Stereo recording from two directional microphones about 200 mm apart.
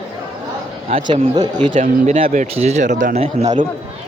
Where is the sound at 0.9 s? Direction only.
30° right (ahead or behind).